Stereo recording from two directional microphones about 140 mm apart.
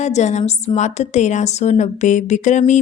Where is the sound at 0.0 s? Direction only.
55° left (ahead or behind).